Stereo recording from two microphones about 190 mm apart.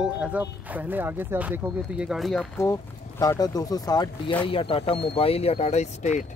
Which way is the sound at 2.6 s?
15° left (ahead or behind).